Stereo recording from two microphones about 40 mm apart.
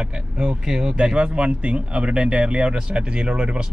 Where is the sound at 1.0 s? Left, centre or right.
Right.